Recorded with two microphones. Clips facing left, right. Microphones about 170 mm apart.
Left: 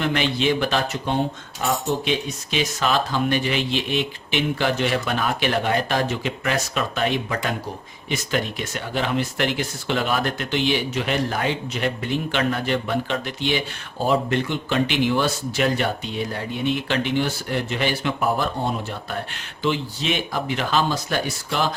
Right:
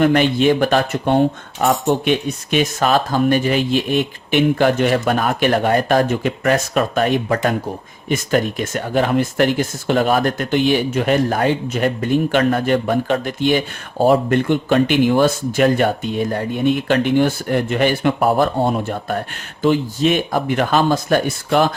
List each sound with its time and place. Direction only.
0.0 s speech: 50° right (ahead or behind)